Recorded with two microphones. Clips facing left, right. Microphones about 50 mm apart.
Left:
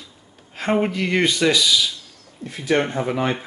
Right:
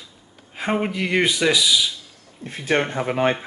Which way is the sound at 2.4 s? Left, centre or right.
Right.